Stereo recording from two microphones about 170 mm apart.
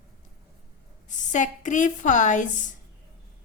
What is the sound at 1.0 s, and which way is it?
A woman's voice, 45° left (ahead or behind).